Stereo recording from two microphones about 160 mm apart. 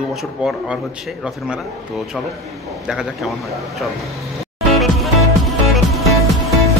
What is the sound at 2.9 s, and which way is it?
Speech, centre (ahead or behind).